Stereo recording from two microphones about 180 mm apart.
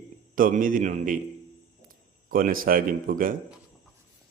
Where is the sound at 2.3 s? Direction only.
50° right (ahead or behind).